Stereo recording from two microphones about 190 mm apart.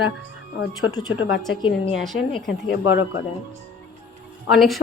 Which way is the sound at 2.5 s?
70° left (ahead or behind).